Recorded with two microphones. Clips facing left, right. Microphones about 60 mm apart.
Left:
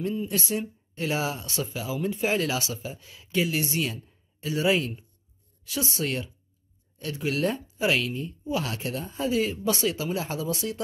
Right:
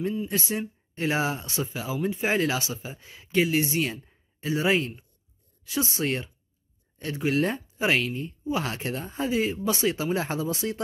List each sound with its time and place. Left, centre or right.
0.3 s speech: right